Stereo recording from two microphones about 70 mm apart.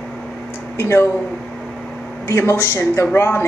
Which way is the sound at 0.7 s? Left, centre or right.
Left.